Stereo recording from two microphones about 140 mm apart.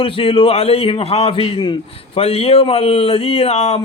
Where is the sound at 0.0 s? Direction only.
40° left (ahead or behind).